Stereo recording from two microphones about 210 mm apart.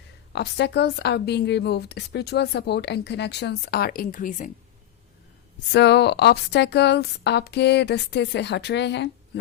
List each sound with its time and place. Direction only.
0.3 s a woman's voice: 55° left (ahead or behind)
5.7 s a woman's voice: 55° left (ahead or behind)